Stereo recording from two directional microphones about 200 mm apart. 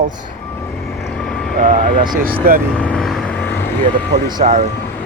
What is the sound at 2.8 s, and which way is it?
Vehicle, 5° left (ahead or behind).